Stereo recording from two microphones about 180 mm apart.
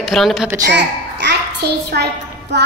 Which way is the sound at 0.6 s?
75° right (ahead or behind).